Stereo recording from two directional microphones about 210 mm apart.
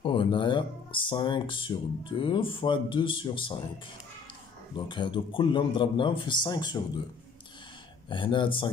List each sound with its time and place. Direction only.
0.0 s speech: 25° left (ahead or behind)
4.7 s speech: 20° left (ahead or behind)
8.1 s speech: 25° left (ahead or behind)